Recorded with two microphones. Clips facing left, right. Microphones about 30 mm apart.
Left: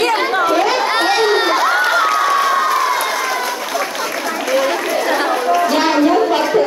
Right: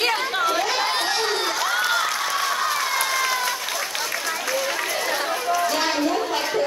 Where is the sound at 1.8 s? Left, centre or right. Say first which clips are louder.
Left 8 dB; left.